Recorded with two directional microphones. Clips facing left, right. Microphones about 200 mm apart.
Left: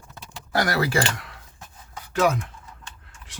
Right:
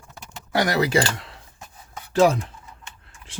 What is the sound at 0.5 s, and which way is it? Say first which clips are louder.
Speech: right 3 dB; 20° right (ahead or behind).